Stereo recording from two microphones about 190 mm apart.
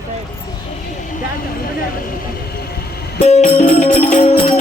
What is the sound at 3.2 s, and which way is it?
Music, 35° left (ahead or behind).